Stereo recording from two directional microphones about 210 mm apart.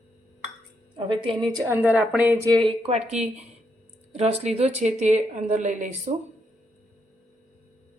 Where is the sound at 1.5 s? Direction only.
10° right (ahead or behind).